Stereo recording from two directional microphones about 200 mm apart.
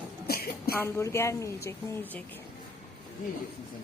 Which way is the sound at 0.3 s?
50° left (ahead or behind).